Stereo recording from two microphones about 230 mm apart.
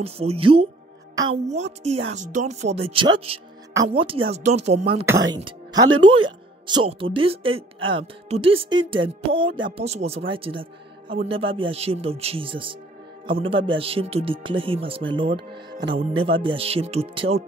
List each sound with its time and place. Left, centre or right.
0.0 s speech: right
5.0 s speech: centre